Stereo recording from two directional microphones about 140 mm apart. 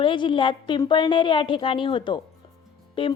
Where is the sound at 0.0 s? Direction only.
35° left (ahead or behind).